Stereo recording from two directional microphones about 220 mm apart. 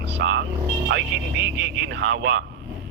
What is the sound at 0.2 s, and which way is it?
A man's voice, 55° right (ahead or behind).